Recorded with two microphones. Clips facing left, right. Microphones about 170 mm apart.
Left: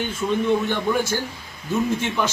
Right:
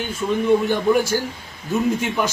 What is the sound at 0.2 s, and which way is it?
Speech, centre (ahead or behind).